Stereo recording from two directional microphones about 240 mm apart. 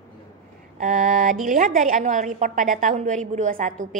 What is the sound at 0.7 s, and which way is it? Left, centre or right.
A woman's voice, right.